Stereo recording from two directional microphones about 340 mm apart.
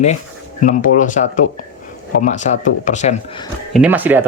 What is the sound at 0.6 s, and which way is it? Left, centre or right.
Speech, left.